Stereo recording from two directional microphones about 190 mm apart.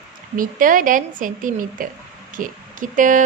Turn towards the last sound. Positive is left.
turn(degrees=-45)  # may be behind; listen again after turning